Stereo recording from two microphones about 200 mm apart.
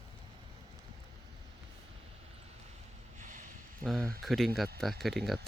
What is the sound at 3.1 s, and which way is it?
Vehicle, 40° right (ahead or behind).